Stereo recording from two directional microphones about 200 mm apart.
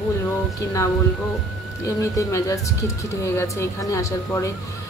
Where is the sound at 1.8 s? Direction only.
15° left (ahead or behind).